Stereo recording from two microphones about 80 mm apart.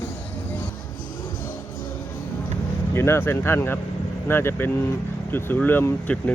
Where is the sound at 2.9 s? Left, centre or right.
Left.